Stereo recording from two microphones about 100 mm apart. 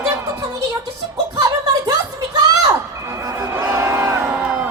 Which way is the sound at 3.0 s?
35° right (ahead or behind).